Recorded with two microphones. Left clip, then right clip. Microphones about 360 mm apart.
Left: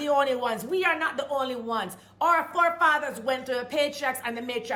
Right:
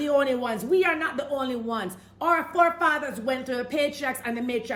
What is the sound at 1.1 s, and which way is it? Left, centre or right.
Speech, left.